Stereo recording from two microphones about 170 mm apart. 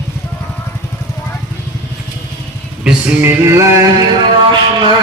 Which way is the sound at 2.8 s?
5° right (ahead or behind).